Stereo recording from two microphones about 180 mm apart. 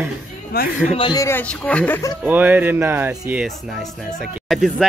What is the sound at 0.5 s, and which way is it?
Speech, 55° left (ahead or behind).